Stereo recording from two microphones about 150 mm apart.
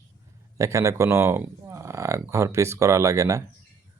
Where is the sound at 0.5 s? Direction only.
20° right (ahead or behind).